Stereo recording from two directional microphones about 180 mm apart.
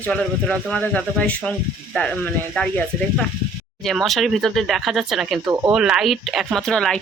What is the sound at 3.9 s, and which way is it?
Speech, centre (ahead or behind).